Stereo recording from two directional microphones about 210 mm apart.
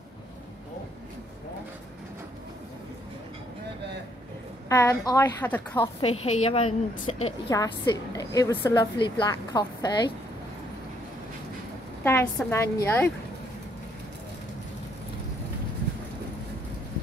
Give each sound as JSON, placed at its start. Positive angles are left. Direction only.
{"t": 4.6, "sound": "a woman's voice", "side_deg": 15}
{"t": 12.0, "sound": "a woman's voice", "side_deg": 10}